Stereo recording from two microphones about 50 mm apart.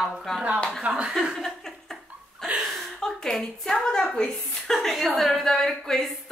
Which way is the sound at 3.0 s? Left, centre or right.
Centre.